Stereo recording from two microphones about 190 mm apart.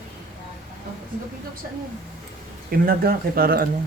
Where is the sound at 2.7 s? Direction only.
50° right (ahead or behind).